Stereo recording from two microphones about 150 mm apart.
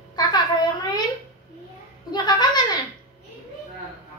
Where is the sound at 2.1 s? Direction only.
30° left (ahead or behind).